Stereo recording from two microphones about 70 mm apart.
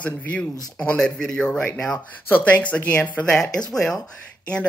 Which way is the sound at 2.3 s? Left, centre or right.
Left.